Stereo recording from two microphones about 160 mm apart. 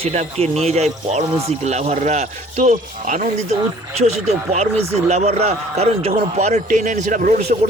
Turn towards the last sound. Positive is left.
turn(degrees=-55)  # may be behind; listen again after turning